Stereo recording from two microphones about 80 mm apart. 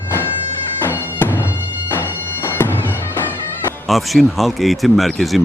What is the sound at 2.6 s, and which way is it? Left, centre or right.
Bagpipes, left.